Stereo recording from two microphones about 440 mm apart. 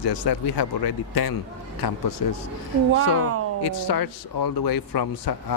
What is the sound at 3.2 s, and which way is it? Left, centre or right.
Speech, right.